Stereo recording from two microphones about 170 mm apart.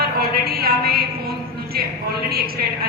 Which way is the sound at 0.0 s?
65° right (ahead or behind).